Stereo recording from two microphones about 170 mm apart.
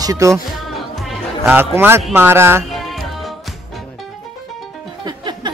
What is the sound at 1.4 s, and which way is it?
Speech, 10° right (ahead or behind).